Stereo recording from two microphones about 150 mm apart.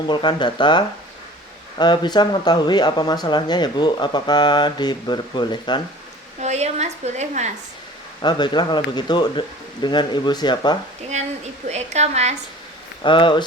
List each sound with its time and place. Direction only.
0.1 s speech: 30° left (ahead or behind)
6.4 s a woman's voice: 50° right (ahead or behind)
8.2 s speech: 30° left (ahead or behind)
11.7 s a woman's voice: 50° right (ahead or behind)
13.0 s speech: 35° left (ahead or behind)